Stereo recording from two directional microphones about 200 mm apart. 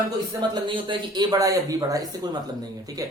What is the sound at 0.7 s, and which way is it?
Speech, 25° right (ahead or behind).